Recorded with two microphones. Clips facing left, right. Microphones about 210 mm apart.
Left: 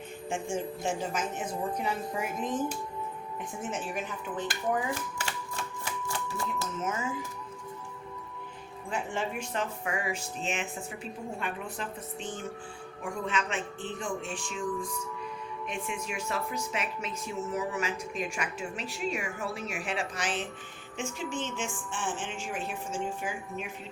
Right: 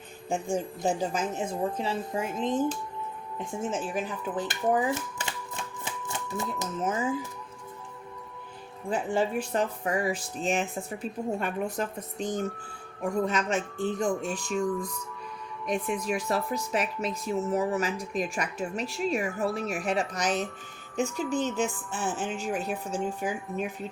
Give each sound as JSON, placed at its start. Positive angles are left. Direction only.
{"t": 0.3, "sound": "a woman's voice", "side_deg": -35}
{"t": 3.6, "sound": "speech", "side_deg": -30}
{"t": 5.1, "sound": "typewriter", "side_deg": -20}
{"t": 8.9, "sound": "speech", "side_deg": -35}